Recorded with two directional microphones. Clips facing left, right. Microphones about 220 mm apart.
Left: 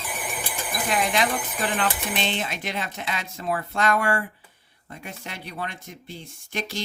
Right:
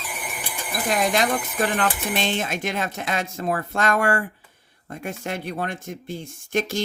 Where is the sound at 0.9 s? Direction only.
45° right (ahead or behind).